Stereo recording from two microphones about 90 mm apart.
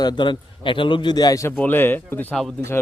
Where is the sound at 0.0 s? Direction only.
55° left (ahead or behind).